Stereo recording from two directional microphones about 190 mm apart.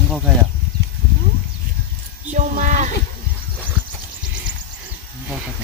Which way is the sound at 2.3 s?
40° right (ahead or behind).